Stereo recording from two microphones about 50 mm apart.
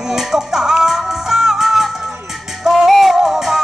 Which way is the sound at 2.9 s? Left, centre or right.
Centre.